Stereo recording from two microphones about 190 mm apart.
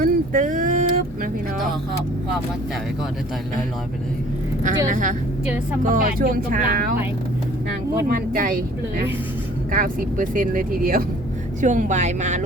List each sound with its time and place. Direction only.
0.0 s vehicle: 45° right (ahead or behind)
4.9 s speech: 45° right (ahead or behind)
8.1 s speech: 45° right (ahead or behind)
9.7 s speech: 45° right (ahead or behind)